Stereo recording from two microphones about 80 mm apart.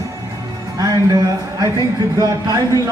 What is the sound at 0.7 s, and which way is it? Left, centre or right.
A man's voice, right.